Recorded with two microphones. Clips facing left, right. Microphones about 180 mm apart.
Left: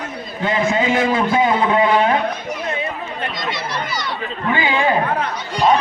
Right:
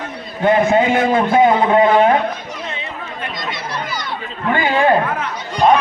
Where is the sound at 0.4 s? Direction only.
55° right (ahead or behind).